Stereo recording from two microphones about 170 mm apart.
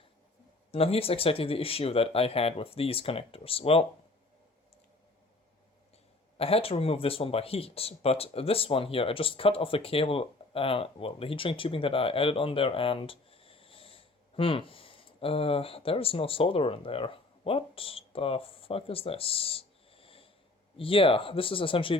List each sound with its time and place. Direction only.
0.7 s speech: 35° left (ahead or behind)
6.3 s speech: 35° left (ahead or behind)